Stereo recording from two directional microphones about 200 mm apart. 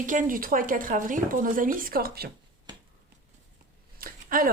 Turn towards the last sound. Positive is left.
turn(degrees=-45)  # may be behind; listen again after turning